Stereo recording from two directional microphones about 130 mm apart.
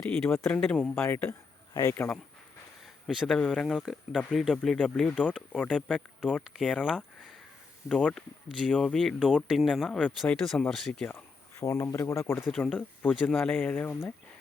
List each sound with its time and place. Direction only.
0.1 s speech: 15° left (ahead or behind)
0.4 s speech: 5° left (ahead or behind)
0.9 s speech: 20° left (ahead or behind)
2.8 s a sound: 5° right (ahead or behind)
3.3 s speech: 5° left (ahead or behind)
7.9 s speech: 5° left (ahead or behind)
11.6 s speech: 25° left (ahead or behind)
12.5 s speech: centre (ahead or behind)